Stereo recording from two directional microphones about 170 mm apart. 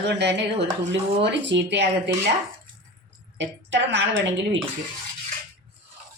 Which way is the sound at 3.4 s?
90° right.